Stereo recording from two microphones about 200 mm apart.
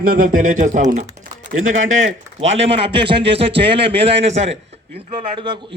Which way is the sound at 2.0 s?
35° right (ahead or behind).